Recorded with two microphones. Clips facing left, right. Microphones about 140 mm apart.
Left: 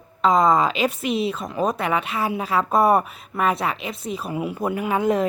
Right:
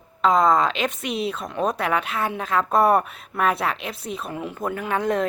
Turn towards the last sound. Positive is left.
turn(degrees=5)  # may be behind; listen again after turning